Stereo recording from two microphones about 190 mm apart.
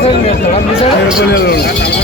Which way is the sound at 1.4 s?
60° left (ahead or behind).